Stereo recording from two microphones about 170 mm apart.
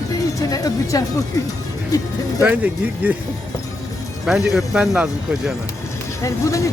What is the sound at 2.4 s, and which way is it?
Speech, 10° right (ahead or behind).